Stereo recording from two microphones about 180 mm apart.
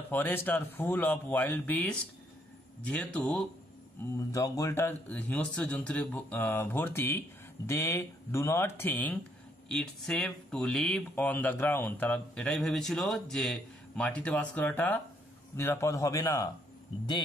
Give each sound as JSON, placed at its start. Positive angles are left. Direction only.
{"t": 0.1, "sound": "a man's voice", "side_deg": 10}
{"t": 4.3, "sound": "a man's voice", "side_deg": 20}